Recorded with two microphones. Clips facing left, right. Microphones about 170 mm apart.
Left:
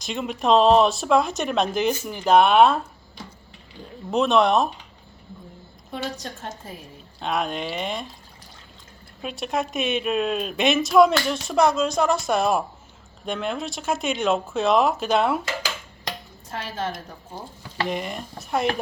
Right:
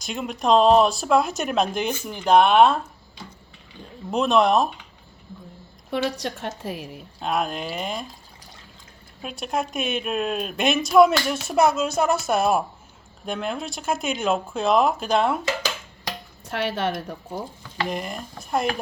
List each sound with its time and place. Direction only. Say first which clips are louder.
0.0 s a woman's voice: left 1 dB; centre (ahead or behind)
4.1 s a woman's voice: even; centre (ahead or behind)
5.9 s a woman's voice: right 6 dB; 70° right (ahead or behind)
7.2 s a woman's voice: even; centre (ahead or behind)
9.2 s a woman's voice: left 1 dB; centre (ahead or behind)
16.5 s a woman's voice: right 5 dB; 70° right (ahead or behind)
17.8 s a woman's voice: left 1 dB; centre (ahead or behind)